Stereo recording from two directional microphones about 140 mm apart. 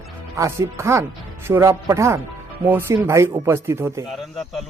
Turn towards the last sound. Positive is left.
turn(degrees=-20)  # may be behind; listen again after turning